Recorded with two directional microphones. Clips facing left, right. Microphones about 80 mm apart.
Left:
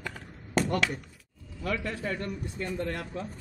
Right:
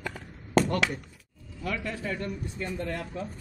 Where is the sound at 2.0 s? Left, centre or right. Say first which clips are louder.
Even; left.